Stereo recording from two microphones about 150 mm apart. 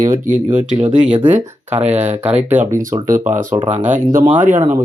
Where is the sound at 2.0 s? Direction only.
10° right (ahead or behind).